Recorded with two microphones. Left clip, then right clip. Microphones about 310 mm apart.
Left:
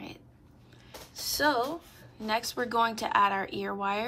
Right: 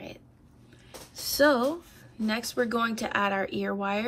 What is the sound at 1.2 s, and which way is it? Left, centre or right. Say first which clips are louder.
A woman's voice: right 4 dB; centre.